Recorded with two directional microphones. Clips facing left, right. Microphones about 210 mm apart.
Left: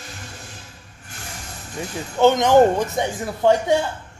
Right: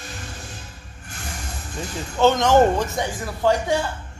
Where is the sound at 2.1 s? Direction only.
15° left (ahead or behind).